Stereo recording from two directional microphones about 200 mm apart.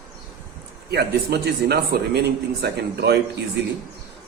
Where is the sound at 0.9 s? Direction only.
55° right (ahead or behind).